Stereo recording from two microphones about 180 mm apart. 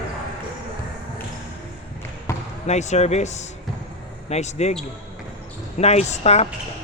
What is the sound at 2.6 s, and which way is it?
Speech, 40° left (ahead or behind).